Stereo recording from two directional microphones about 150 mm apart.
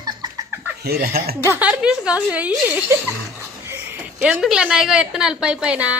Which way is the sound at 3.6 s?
15° right (ahead or behind).